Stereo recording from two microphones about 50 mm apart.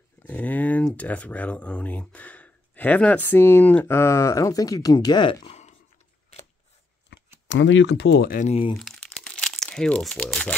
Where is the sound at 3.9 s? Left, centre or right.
Left.